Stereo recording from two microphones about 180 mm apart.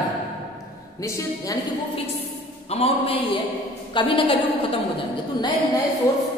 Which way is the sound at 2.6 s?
35° left (ahead or behind).